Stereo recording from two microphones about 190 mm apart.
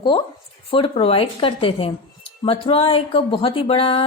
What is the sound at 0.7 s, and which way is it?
A woman's voice, 25° left (ahead or behind).